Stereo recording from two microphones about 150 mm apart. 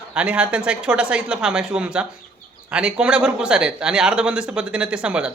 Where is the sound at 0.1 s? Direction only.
10° right (ahead or behind).